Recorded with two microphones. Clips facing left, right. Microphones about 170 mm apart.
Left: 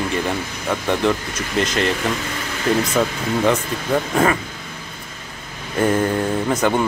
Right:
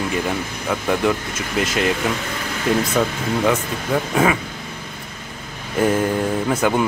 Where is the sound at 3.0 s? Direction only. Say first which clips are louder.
Even; centre (ahead or behind).